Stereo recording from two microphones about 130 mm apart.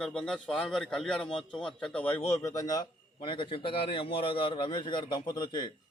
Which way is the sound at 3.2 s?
40° left (ahead or behind).